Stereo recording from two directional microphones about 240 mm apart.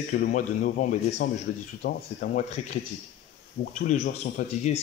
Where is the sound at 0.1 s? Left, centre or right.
Left.